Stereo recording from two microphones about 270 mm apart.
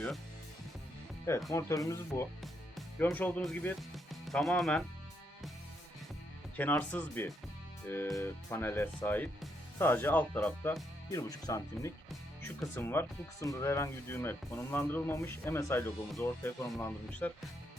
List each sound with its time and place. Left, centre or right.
1.2 s speech: centre
6.6 s speech: centre